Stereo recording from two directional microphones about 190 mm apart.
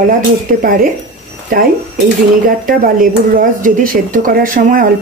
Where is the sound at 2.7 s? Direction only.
45° right (ahead or behind).